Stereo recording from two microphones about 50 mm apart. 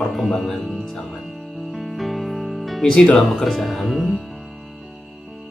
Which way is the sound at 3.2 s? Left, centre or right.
Centre.